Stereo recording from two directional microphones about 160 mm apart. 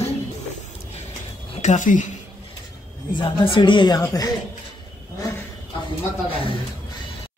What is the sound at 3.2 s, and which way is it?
Speech, 30° left (ahead or behind).